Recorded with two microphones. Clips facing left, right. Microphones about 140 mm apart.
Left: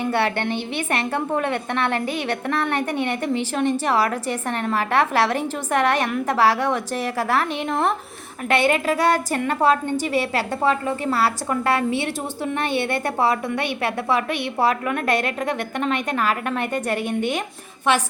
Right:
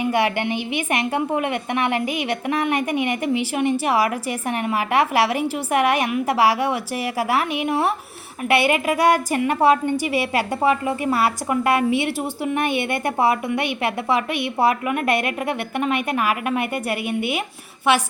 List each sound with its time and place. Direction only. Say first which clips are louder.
0.0 s a woman's voice: right 1 dB; 15° right (ahead or behind)